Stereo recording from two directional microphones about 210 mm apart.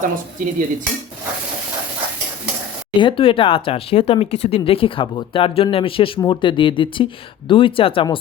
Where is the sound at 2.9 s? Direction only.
25° left (ahead or behind).